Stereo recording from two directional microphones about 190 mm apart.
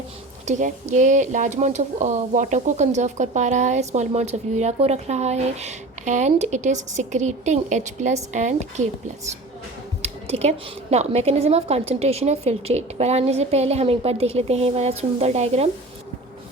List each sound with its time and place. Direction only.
0.4 s speech: 40° right (ahead or behind)
10.0 s a sound: 35° right (ahead or behind)
10.9 s speech: 35° right (ahead or behind)